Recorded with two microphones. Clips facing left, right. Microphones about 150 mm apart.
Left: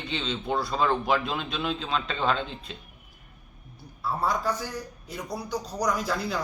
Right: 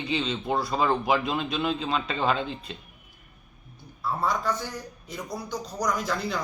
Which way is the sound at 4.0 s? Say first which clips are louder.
Even; 10° left (ahead or behind).